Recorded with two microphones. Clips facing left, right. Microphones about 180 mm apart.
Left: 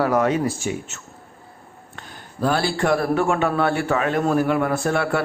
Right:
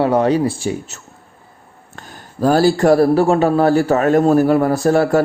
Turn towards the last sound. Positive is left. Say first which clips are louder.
# right 8 dB
turn(degrees=-40)  # may be behind; listen again after turning